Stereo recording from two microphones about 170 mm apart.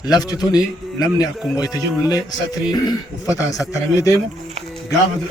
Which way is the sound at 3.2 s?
20° left (ahead or behind).